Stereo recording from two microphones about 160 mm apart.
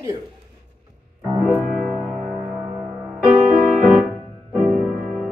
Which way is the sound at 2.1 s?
40° right (ahead or behind).